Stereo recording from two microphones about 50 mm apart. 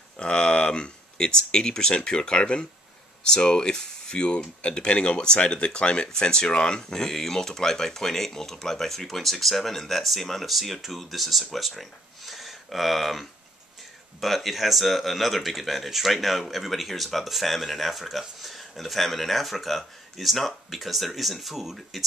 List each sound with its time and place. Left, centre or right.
0.2 s speech: centre